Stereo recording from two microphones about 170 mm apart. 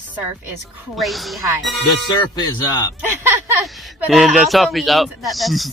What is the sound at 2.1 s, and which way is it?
Speech, 25° left (ahead or behind).